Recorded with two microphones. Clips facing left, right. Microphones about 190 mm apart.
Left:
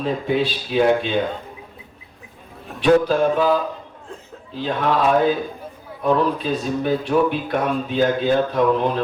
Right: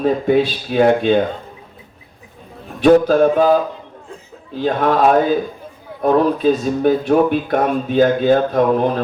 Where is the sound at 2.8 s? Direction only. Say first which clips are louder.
Right 5 dB; 50° right (ahead or behind).